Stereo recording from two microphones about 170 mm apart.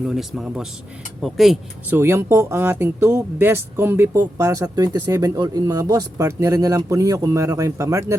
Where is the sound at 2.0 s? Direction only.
15° right (ahead or behind).